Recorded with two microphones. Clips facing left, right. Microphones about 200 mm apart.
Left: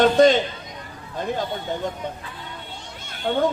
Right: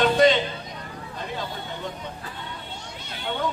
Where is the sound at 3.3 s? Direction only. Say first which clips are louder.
Left 8 dB; 45° left (ahead or behind).